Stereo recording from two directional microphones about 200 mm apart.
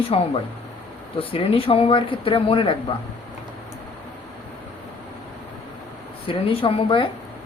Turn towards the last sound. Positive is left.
turn(degrees=25)  # may be behind; listen again after turning